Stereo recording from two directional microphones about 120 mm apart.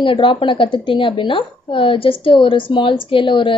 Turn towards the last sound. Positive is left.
turn(degrees=45)  # may be behind; listen again after turning